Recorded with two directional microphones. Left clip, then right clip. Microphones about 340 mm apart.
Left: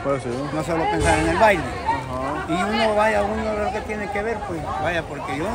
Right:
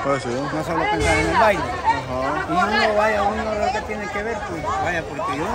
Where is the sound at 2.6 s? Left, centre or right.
Centre.